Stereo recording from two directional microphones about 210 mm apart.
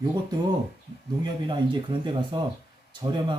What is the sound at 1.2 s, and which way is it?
Speech, 20° right (ahead or behind).